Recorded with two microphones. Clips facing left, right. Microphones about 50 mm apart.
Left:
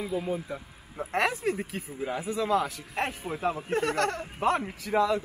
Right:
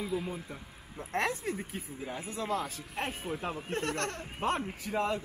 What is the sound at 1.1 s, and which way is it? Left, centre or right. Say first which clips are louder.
Speech: left 5 dB; left.